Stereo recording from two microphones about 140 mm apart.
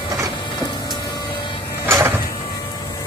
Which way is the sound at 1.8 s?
15° right (ahead or behind).